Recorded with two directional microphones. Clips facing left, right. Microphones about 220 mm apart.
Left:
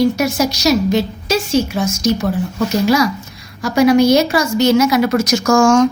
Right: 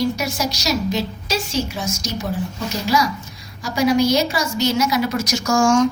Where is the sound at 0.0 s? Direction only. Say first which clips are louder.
Left 7 dB; 55° left (ahead or behind).